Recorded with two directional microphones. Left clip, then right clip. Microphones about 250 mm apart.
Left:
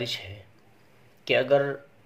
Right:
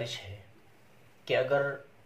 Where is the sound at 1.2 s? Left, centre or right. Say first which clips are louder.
Left 6 dB; left.